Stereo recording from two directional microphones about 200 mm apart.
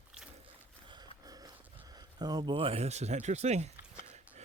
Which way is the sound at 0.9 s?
20° right (ahead or behind).